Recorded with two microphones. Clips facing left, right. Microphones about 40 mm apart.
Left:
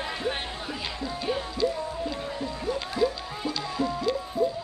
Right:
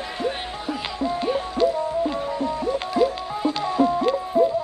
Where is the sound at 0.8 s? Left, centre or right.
Right.